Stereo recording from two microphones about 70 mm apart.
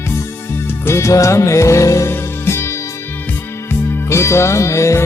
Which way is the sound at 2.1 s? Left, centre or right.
Left.